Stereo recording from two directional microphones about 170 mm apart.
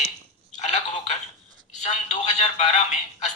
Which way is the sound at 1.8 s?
45° left (ahead or behind).